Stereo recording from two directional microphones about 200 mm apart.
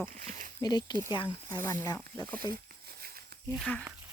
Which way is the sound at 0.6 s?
20° left (ahead or behind).